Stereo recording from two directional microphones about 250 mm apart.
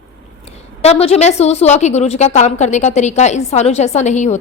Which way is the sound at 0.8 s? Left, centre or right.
Left.